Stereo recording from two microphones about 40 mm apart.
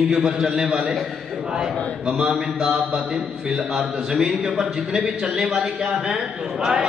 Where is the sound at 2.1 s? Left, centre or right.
Centre.